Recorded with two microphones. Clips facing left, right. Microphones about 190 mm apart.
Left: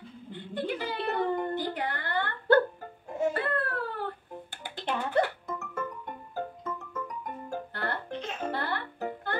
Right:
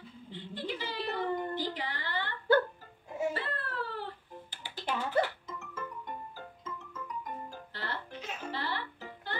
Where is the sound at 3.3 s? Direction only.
55° left (ahead or behind).